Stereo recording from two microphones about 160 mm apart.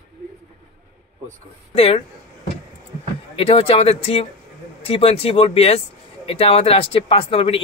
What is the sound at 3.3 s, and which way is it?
Speech, 35° left (ahead or behind).